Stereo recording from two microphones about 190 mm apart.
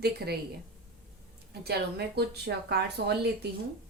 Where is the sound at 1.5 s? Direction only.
60° right (ahead or behind).